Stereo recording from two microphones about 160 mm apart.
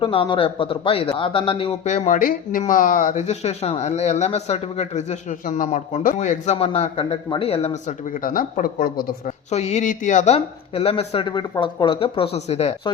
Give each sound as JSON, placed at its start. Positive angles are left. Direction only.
{"t": 0.0, "sound": "speech", "side_deg": 35}
{"t": 9.5, "sound": "speech", "side_deg": 45}